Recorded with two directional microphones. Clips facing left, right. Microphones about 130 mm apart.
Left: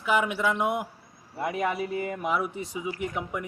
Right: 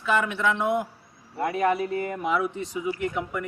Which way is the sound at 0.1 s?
10° left (ahead or behind).